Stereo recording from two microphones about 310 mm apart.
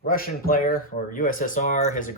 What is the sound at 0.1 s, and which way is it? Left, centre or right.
Speech, left.